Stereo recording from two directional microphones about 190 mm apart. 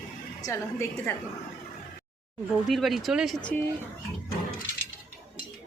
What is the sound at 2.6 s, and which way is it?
Speech, centre (ahead or behind).